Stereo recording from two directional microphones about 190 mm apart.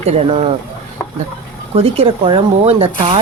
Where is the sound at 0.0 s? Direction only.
30° right (ahead or behind).